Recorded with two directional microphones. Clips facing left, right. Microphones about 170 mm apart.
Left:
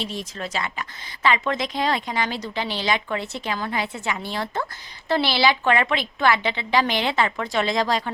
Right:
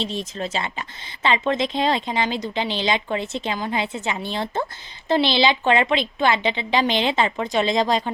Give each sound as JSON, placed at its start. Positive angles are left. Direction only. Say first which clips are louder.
{"t": 0.0, "sound": "speech", "louder": "right 3 dB", "side_deg": -25}